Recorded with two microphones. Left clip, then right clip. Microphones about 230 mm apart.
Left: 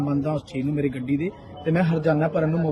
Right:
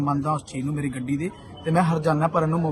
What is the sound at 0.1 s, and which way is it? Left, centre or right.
Speech, right.